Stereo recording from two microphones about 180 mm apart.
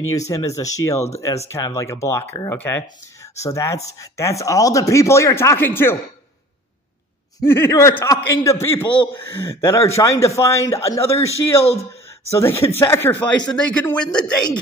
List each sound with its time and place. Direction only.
0.1 s speech: 15° left (ahead or behind)
7.3 s a man's voice: 15° left (ahead or behind)